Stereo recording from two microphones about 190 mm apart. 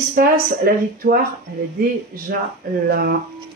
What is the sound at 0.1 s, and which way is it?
Speech, 50° right (ahead or behind).